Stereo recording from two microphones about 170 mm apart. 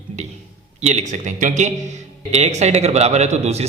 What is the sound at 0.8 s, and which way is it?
A man's voice, 40° right (ahead or behind).